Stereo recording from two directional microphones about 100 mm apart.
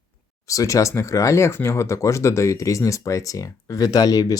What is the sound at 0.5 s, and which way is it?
Speech, 35° left (ahead or behind).